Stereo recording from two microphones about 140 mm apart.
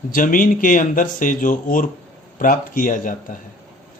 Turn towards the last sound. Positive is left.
turn(degrees=70)  # may be behind; listen again after turning